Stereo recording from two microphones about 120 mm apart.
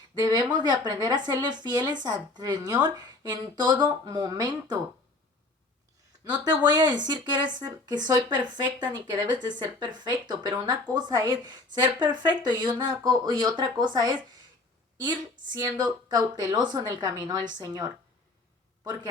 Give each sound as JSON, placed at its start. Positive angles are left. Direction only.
{"t": 0.2, "sound": "speech", "side_deg": -35}
{"t": 6.2, "sound": "speech", "side_deg": -35}